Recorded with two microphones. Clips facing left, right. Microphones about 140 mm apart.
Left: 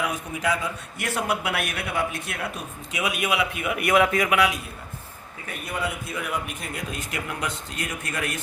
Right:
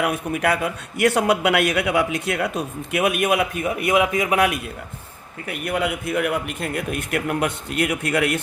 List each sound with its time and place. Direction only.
0.0 s a man's voice: 65° right (ahead or behind); by 3.0 s 80° right
3.0 s a man's voice: 55° right (ahead or behind); by 3.8 s 35° right (ahead or behind)
3.8 s a man's voice: 15° right (ahead or behind)
4.4 s a man's voice: 55° right (ahead or behind)
5.5 s a man's voice: 70° right (ahead or behind)